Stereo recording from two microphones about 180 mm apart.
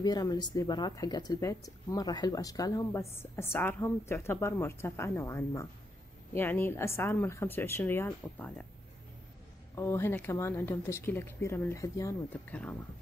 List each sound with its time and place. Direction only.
0.0 s speech: 20° left (ahead or behind)
9.8 s speech: 15° left (ahead or behind)